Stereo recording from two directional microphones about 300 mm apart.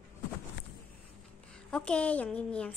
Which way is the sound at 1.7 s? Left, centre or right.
Centre.